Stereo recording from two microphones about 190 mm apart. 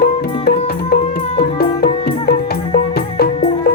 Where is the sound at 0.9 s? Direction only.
55° left (ahead or behind).